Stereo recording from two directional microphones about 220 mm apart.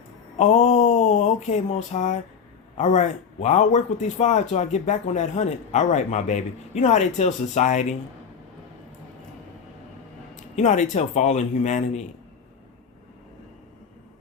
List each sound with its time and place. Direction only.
0.3 s speech: 30° left (ahead or behind)
10.5 s speech: 35° left (ahead or behind)